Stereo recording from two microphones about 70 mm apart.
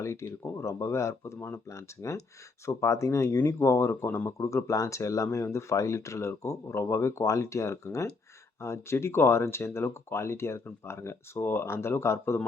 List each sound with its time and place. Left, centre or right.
0.0 s speech: left